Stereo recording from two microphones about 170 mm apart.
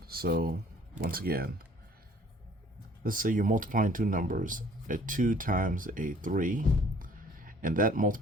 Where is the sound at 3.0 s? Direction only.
55° right (ahead or behind).